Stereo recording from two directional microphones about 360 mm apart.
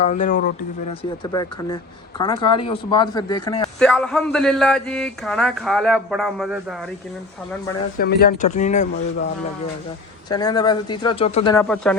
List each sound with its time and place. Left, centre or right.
0.0 s speech: left
1.2 s speech: centre
7.9 s speech: left; by 11.9 s centre